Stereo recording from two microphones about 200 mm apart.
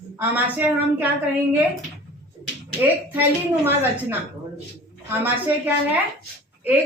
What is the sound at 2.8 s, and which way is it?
A woman's voice, 10° right (ahead or behind).